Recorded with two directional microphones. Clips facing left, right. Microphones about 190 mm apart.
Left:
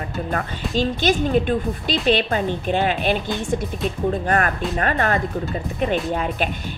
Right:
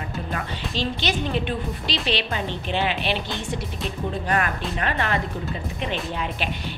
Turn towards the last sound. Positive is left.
turn(degrees=50)  # may be behind; listen again after turning